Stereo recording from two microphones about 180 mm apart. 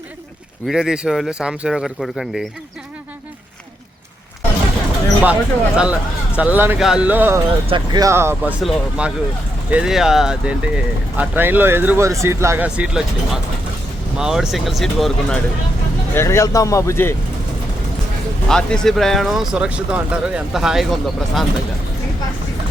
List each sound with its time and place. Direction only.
0.7 s speech: 5° right (ahead or behind)
5.2 s speech: 5° right (ahead or behind)
16.1 s a man's voice: 15° left (ahead or behind)
18.4 s speech: 5° left (ahead or behind)